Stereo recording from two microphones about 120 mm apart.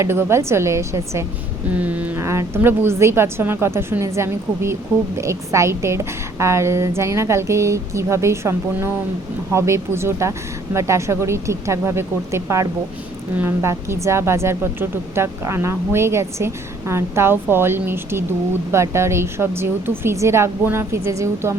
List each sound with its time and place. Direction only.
0.0 s a woman's voice: 20° right (ahead or behind)
1.7 s a sound: 10° right (ahead or behind)
2.1 s a woman's voice: 25° right (ahead or behind)